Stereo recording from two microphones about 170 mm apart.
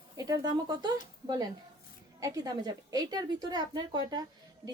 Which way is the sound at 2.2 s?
20° right (ahead or behind).